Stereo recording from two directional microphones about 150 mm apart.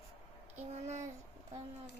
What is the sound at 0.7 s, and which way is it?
Speech, 50° right (ahead or behind).